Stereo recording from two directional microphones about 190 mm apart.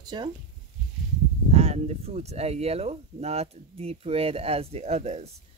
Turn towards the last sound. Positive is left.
turn(degrees=-35)  # may be behind; listen again after turning